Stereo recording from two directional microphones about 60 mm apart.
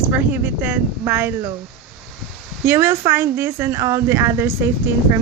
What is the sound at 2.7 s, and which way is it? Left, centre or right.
A woman's voice, right.